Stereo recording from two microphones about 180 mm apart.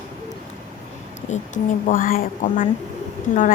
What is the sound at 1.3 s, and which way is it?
Speech, 45° left (ahead or behind).